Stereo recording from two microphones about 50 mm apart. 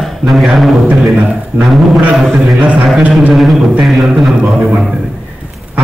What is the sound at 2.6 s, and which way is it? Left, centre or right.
Speech, right.